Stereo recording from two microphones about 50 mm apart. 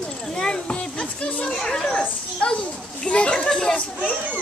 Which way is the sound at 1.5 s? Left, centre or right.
Centre.